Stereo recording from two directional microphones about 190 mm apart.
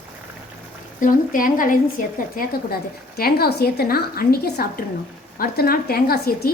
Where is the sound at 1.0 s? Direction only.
45° left (ahead or behind).